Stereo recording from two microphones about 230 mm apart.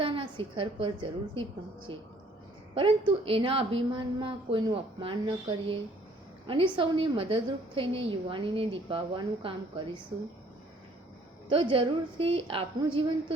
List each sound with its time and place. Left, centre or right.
0.0 s a woman's voice: right
11.4 s a woman's voice: right